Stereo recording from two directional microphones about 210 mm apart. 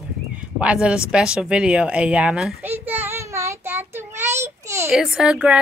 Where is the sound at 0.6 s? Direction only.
5° right (ahead or behind).